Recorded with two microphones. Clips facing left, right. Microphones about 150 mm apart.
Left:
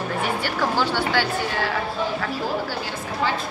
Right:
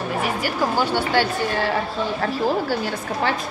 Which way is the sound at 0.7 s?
20° right (ahead or behind).